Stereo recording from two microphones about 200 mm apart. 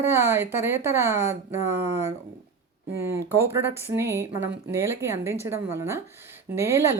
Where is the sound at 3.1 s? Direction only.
15° right (ahead or behind).